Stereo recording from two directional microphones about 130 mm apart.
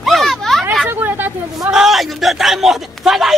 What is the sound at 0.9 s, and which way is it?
Speech, 15° right (ahead or behind).